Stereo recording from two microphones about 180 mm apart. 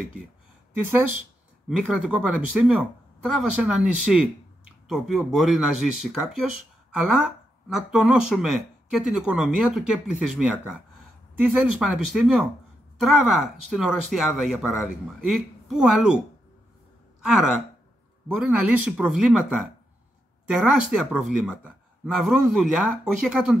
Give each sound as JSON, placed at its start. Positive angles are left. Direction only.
{"t": 0.7, "sound": "speech", "side_deg": -10}
{"t": 7.7, "sound": "speech", "side_deg": -5}
{"t": 17.2, "sound": "speech", "side_deg": -5}